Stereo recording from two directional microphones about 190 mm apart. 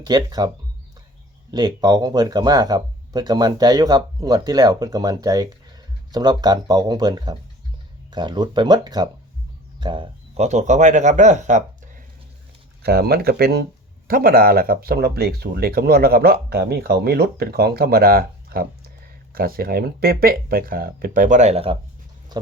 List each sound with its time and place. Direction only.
0.0 s speech: 20° right (ahead or behind); by 12.0 s 40° right (ahead or behind)
12.8 s speech: 55° right (ahead or behind); by 21.8 s 30° right (ahead or behind)